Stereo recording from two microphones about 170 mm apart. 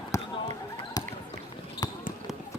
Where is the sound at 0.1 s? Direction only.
15° left (ahead or behind).